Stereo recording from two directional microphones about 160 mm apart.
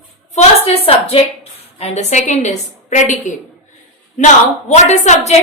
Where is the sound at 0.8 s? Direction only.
35° left (ahead or behind).